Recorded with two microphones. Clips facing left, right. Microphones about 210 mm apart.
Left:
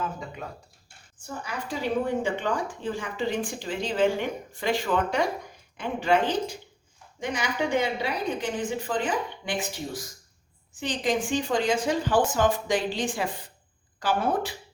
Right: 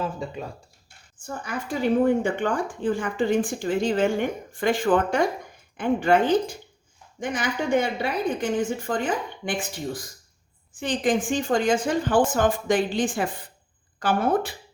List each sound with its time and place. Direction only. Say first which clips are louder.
1.5 s a woman's voice: right 6 dB; 50° right (ahead or behind)